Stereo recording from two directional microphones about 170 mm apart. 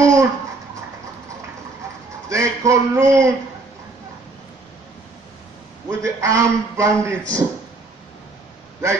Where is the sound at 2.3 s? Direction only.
20° right (ahead or behind).